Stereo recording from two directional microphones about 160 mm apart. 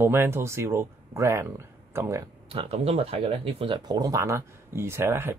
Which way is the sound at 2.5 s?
35° right (ahead or behind).